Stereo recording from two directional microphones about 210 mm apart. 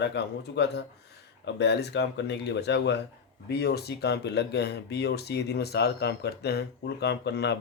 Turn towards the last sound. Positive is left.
turn(degrees=55)  # may be behind; listen again after turning